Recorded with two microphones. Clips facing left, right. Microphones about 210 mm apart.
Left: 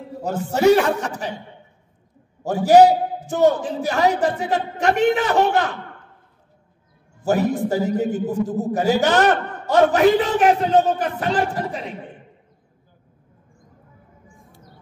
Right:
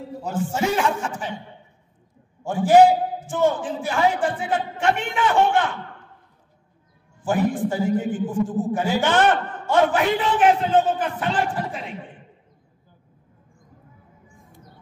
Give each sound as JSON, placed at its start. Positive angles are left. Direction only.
{"t": 0.2, "sound": "a man's voice", "side_deg": 40}
{"t": 2.4, "sound": "a man's voice", "side_deg": 40}
{"t": 7.2, "sound": "a man's voice", "side_deg": 40}